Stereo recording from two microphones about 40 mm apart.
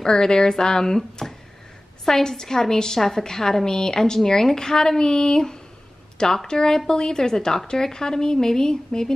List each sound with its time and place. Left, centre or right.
0.0 s a woman's voice: centre